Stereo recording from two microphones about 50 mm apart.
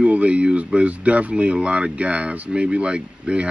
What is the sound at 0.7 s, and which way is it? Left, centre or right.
Speech, right.